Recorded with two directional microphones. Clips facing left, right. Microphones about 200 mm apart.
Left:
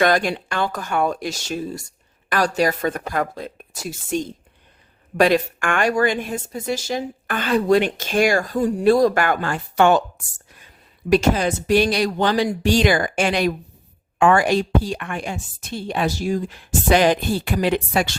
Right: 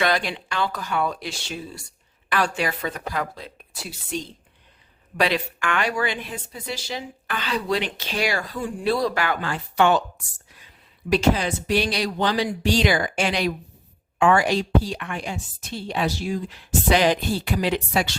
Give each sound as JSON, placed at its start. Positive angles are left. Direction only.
{"t": 0.0, "sound": "speech", "side_deg": 45}